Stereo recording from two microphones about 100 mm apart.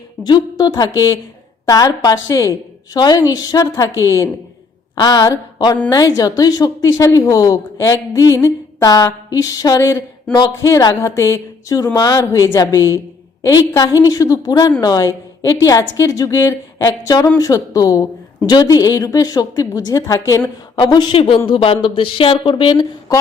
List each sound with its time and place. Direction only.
0.3 s a woman's voice: 45° left (ahead or behind)
4.9 s a woman's voice: 45° left (ahead or behind)
16.8 s a woman's voice: 40° left (ahead or behind)
20.7 s a woman's voice: 50° left (ahead or behind)
21.2 s speech: 65° left (ahead or behind)